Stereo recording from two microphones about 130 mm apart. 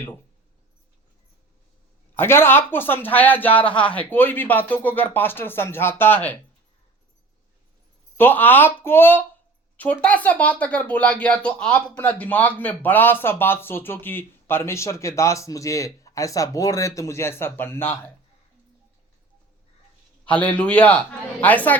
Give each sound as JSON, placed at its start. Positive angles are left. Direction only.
{"t": 2.1, "sound": "speech", "side_deg": 20}
{"t": 8.1, "sound": "speech", "side_deg": 15}
{"t": 20.2, "sound": "speech", "side_deg": 10}